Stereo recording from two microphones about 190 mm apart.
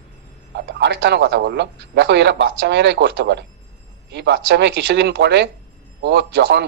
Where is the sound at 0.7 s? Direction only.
65° right (ahead or behind).